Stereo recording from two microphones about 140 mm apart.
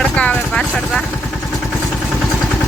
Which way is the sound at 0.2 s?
5° left (ahead or behind).